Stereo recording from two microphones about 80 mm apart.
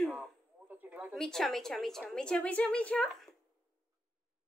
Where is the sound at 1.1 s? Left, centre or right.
Centre.